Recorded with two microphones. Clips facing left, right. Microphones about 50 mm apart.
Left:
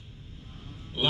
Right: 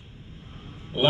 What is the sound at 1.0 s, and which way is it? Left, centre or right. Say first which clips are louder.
Speech: right 6 dB; right.